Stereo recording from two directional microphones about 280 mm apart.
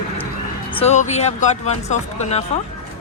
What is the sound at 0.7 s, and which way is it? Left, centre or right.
Speech, left.